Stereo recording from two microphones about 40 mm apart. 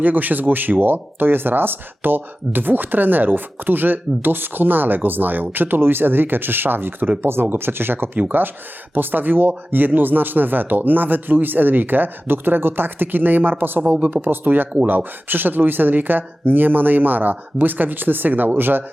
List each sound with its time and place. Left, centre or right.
0.0 s speech: right
7.2 s speech: right